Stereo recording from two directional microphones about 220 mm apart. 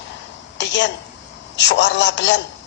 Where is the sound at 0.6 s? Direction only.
55° left (ahead or behind).